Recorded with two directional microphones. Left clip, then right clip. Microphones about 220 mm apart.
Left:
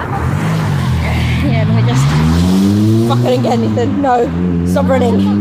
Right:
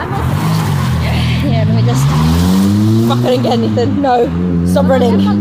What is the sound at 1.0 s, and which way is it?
Vehicle, 5° right (ahead or behind).